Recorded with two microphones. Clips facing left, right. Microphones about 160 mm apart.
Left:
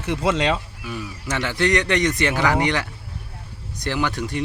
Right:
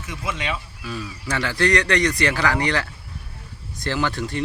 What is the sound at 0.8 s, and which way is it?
Speech, 15° left (ahead or behind).